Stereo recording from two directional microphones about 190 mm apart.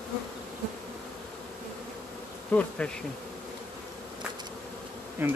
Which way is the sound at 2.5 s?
10° left (ahead or behind).